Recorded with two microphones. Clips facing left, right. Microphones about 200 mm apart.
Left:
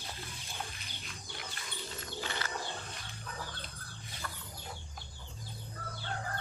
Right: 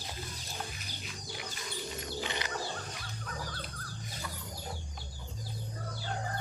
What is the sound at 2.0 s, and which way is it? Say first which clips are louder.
Bird: right 1 dB; 15° right (ahead or behind).